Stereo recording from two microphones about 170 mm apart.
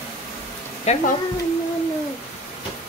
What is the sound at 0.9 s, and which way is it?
Speech, 40° left (ahead or behind).